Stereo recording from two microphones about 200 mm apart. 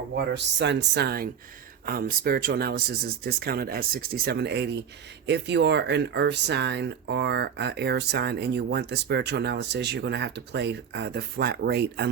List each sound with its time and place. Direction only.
0.1 s speech: 60° right (ahead or behind)